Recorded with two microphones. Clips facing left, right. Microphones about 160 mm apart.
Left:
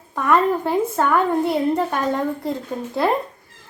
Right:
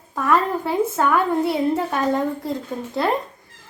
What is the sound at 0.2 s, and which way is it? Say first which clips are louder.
Speech: left 2 dB; centre (ahead or behind).